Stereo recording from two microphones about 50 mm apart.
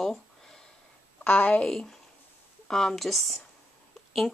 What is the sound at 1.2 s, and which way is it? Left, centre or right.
Speech, left.